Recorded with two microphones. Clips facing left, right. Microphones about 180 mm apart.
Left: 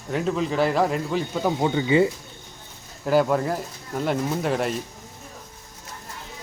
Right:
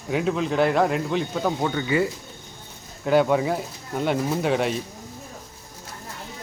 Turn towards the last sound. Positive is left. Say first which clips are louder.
# right 2 dB
turn(degrees=0)  # may be behind; listen again after turning